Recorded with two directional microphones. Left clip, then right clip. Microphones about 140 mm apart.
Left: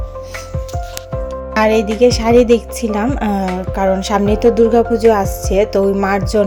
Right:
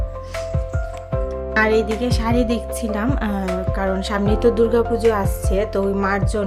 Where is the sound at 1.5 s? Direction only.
35° left (ahead or behind).